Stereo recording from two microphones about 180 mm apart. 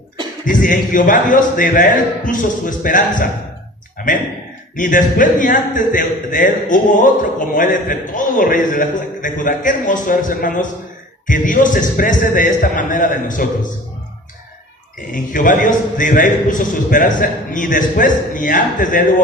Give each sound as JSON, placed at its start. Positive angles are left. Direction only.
{"t": 0.4, "sound": "speech", "side_deg": 45}
{"t": 3.9, "sound": "a sound", "side_deg": 50}
{"t": 4.8, "sound": "speech", "side_deg": 50}
{"t": 15.1, "sound": "speech", "side_deg": 45}